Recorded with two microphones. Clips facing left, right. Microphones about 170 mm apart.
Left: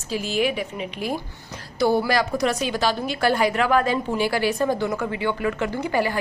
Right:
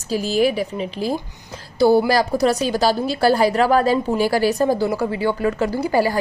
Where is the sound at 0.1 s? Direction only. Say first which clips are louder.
Right 5 dB; 35° right (ahead or behind).